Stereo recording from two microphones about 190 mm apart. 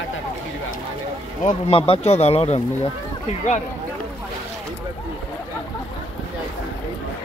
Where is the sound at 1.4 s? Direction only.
30° left (ahead or behind).